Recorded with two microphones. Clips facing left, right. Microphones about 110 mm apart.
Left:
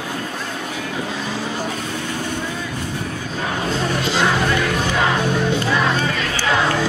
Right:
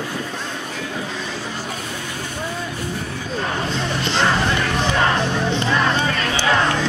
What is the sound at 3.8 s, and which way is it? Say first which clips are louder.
Music: left 2 dB; 5° left (ahead or behind).